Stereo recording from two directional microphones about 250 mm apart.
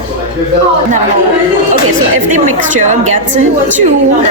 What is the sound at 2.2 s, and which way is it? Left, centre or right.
A woman's voice, right.